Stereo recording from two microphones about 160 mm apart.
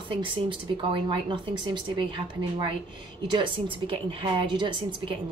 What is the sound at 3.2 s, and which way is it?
Speech, 30° right (ahead or behind).